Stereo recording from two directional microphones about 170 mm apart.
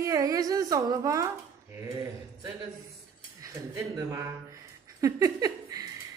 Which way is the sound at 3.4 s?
20° right (ahead or behind).